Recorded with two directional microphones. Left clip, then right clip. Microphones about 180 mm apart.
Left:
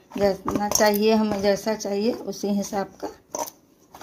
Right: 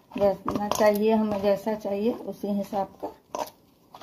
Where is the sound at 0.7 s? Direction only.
50° left (ahead or behind).